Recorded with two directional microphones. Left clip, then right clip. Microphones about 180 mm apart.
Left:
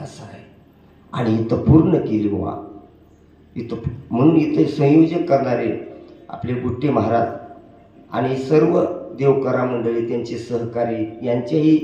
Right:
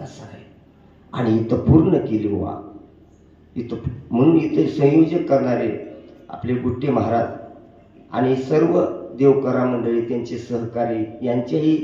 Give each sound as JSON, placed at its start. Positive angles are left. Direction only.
{"t": 0.0, "sound": "a sound", "side_deg": 35}
{"t": 1.1, "sound": "a man's voice", "side_deg": 35}
{"t": 3.5, "sound": "a man's voice", "side_deg": 40}